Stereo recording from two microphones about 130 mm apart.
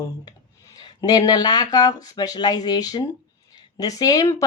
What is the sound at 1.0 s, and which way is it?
Speech, 30° left (ahead or behind).